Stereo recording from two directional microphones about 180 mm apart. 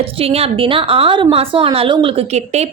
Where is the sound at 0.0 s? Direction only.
30° right (ahead or behind).